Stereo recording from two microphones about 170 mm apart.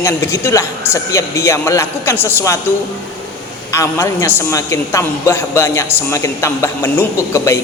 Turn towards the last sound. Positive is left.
turn(degrees=15)  # may be behind; listen again after turning